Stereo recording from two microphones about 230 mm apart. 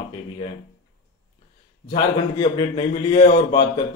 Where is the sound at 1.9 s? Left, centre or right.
Centre.